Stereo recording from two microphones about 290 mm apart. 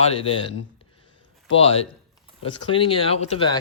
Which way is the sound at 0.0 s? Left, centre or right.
Centre.